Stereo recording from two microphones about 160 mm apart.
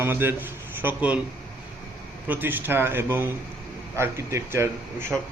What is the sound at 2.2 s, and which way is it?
A man's voice, 10° right (ahead or behind).